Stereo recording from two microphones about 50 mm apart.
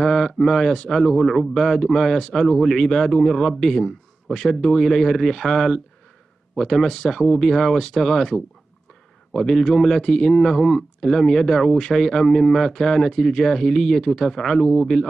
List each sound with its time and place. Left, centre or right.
0.0 s speech: centre